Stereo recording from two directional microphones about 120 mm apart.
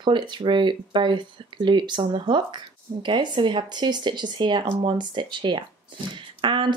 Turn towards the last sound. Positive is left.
turn(degrees=-40)  # may be behind; listen again after turning